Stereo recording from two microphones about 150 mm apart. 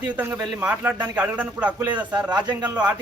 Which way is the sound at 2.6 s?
10° right (ahead or behind).